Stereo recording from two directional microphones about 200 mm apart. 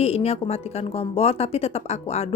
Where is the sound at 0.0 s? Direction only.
30° left (ahead or behind).